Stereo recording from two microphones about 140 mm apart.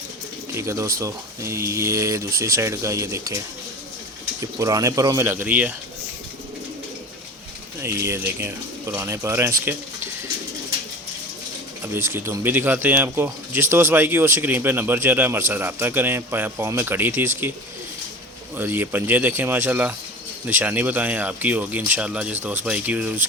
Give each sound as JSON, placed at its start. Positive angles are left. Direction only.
{"t": 0.5, "sound": "speech", "side_deg": -20}
{"t": 7.8, "sound": "speech", "side_deg": -20}
{"t": 11.8, "sound": "speech", "side_deg": -15}
{"t": 18.5, "sound": "speech", "side_deg": -15}